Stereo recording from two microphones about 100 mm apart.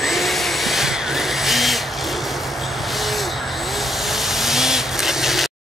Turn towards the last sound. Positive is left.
turn(degrees=0)  # may be behind; listen again after turning